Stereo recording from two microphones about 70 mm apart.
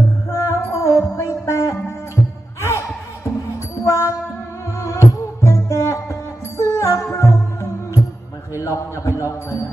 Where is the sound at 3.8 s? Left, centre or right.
Left.